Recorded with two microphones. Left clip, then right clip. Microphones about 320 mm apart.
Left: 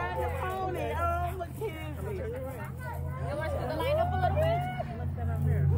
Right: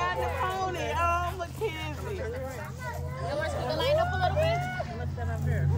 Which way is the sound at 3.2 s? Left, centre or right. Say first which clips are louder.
Right 3 dB; right.